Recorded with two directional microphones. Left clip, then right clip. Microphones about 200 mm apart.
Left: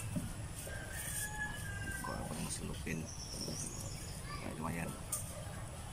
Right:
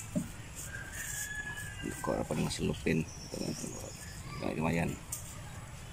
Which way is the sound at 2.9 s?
25° right (ahead or behind).